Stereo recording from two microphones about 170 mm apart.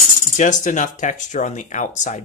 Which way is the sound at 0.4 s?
45° left (ahead or behind).